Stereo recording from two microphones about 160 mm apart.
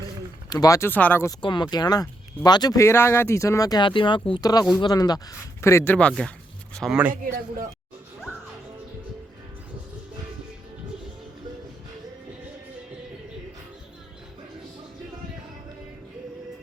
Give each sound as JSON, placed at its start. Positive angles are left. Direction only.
{"t": 0.5, "sound": "speech", "side_deg": 20}
{"t": 1.4, "sound": "a man's voice", "side_deg": 30}